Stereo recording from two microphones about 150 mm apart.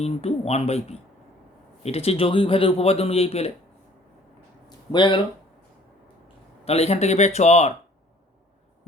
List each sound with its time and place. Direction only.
0.0 s a man's voice: 45° left (ahead or behind)
4.9 s a man's voice: 30° left (ahead or behind)
6.7 s speech: 45° left (ahead or behind)